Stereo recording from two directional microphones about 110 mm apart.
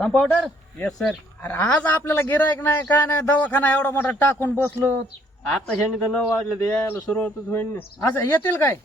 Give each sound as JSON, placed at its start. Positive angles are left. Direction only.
{"t": 0.0, "sound": "speech", "side_deg": 5}
{"t": 5.5, "sound": "a man's voice", "side_deg": 5}
{"t": 6.5, "sound": "speech", "side_deg": 20}